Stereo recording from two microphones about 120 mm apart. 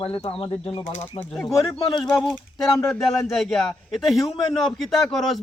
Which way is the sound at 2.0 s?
10° left (ahead or behind).